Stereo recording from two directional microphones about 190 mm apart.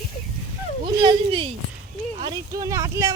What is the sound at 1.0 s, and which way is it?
Speech, 25° right (ahead or behind).